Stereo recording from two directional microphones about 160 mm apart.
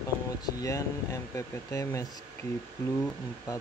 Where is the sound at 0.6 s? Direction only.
20° left (ahead or behind).